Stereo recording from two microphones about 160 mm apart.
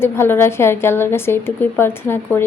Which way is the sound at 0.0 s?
15° left (ahead or behind).